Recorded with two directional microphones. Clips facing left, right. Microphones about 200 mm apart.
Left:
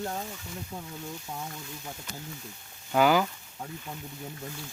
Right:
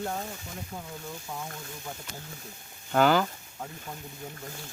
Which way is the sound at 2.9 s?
10° left (ahead or behind).